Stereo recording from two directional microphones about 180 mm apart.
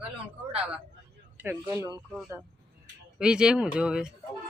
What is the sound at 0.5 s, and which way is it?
Speech, 5° right (ahead or behind).